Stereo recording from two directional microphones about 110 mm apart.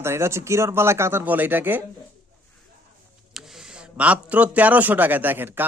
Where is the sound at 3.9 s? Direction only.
10° right (ahead or behind).